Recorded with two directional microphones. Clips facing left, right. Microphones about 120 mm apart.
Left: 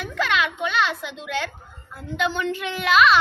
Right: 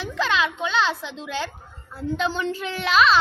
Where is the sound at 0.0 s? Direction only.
30° right (ahead or behind).